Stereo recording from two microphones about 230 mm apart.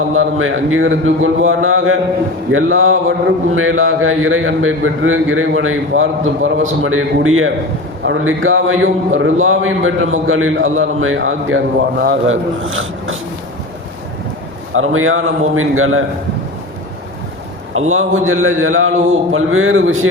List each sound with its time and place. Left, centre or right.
0.1 s a man's voice: right
14.7 s a man's voice: right
17.7 s a man's voice: right